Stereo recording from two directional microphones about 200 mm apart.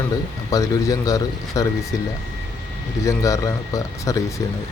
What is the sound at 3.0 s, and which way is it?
Speech, 15° left (ahead or behind).